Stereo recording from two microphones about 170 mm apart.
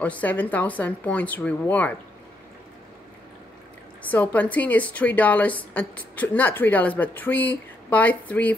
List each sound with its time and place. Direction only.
0.0 s a woman's voice: 10° left (ahead or behind)
4.1 s a woman's voice: 10° left (ahead or behind)